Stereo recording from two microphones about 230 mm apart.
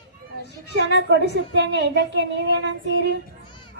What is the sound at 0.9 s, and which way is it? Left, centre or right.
Speech, right.